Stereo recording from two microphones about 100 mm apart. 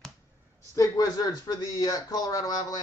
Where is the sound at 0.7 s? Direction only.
35° left (ahead or behind).